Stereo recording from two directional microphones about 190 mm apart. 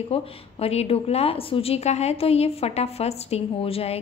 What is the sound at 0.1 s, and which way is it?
A woman's voice, 30° left (ahead or behind).